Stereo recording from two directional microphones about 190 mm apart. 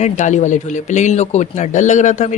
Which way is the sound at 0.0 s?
40° left (ahead or behind).